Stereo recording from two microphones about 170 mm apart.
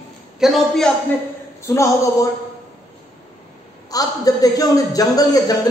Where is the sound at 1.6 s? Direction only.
20° left (ahead or behind).